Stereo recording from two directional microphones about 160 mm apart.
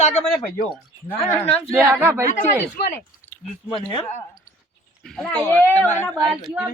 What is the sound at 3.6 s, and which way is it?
Speech, 30° left (ahead or behind).